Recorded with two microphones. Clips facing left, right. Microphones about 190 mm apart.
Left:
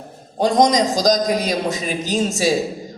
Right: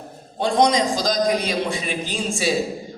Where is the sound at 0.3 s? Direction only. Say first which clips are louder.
Left 3 dB; 40° left (ahead or behind).